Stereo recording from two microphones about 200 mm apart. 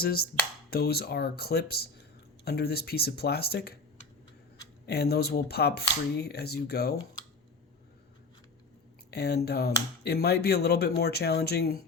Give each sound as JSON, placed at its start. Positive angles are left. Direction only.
{"t": 0.0, "sound": "speech", "side_deg": 50}
{"t": 4.9, "sound": "speech", "side_deg": 55}
{"t": 9.0, "sound": "speech", "side_deg": 55}